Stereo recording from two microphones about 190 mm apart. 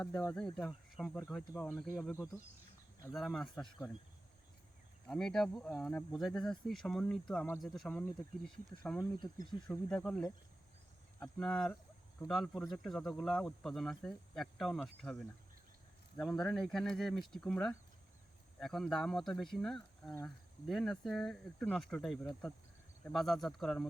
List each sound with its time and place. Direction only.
0.0 s speech: 10° left (ahead or behind)
1.7 s speech: 5° right (ahead or behind)
3.2 s speech: centre (ahead or behind)
5.0 s speech: 5° left (ahead or behind)